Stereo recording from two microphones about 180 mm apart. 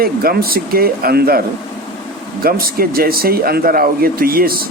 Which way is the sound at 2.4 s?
55° right (ahead or behind).